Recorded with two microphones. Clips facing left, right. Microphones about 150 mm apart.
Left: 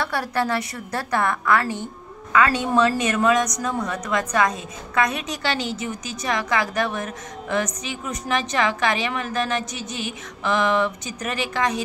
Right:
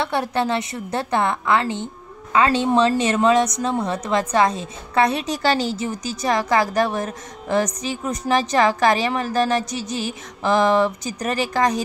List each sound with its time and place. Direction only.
0.0 s a woman's voice: 25° right (ahead or behind); by 11.8 s 40° right (ahead or behind)